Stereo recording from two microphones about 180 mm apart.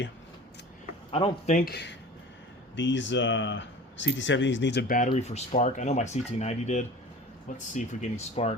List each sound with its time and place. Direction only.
1.1 s speech: 30° left (ahead or behind)
1.5 s speech: 60° left (ahead or behind)
2.7 s speech: 90° left; by 4.9 s 70° left (ahead or behind)
5.0 s speech: 35° left (ahead or behind)